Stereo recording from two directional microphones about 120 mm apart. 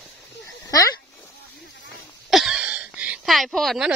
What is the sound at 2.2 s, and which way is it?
Wheeze, 5° right (ahead or behind).